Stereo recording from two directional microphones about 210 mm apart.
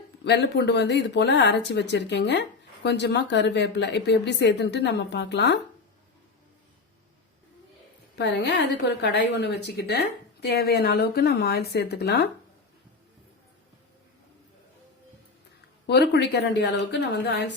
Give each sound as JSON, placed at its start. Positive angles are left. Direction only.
{"t": 0.3, "sound": "speech", "side_deg": 55}
{"t": 8.1, "sound": "speech", "side_deg": 55}
{"t": 15.9, "sound": "speech", "side_deg": 50}